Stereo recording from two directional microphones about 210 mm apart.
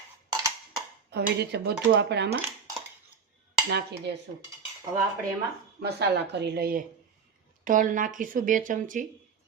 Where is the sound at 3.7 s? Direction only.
50° right (ahead or behind).